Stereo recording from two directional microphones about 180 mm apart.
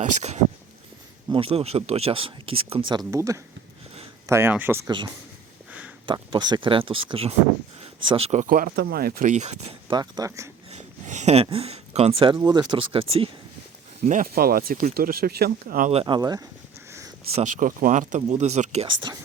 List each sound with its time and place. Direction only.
0.0 s speech: 40° right (ahead or behind)
3.1 s speech: 15° right (ahead or behind)
6.1 s speech: 25° right (ahead or behind)
9.9 s speech: 20° right (ahead or behind)
10.7 s a sound: 40° right (ahead or behind)
11.5 s speech: 35° right (ahead or behind)
14.0 s speech: 50° right (ahead or behind)
15.9 s speech: 30° right (ahead or behind)
17.3 s speech: 45° right (ahead or behind)